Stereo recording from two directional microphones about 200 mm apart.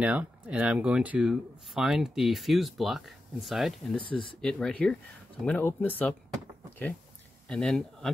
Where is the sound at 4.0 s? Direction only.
25° left (ahead or behind).